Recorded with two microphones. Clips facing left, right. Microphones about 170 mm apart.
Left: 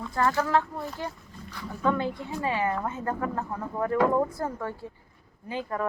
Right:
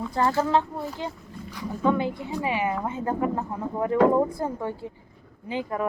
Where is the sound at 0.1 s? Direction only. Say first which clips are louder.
Right 2 dB; 20° right (ahead or behind).